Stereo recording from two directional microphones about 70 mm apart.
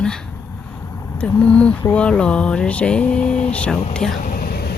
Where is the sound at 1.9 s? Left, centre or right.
Centre.